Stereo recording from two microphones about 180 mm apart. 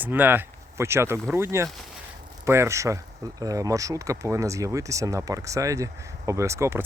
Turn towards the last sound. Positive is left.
turn(degrees=-15)  # may be behind; listen again after turning